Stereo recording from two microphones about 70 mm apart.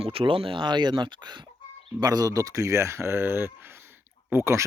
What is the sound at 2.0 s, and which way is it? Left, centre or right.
Speech, right.